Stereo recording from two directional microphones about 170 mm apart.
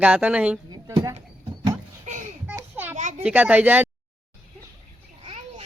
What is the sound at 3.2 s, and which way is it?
Speech, 10° right (ahead or behind).